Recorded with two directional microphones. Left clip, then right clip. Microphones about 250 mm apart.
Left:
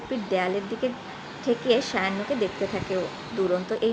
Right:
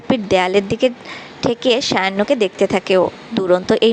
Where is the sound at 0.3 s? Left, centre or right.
Right.